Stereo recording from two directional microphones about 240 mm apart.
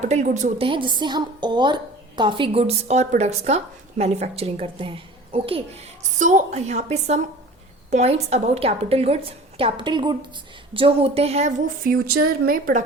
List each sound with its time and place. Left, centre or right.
0.0 s a woman's voice: right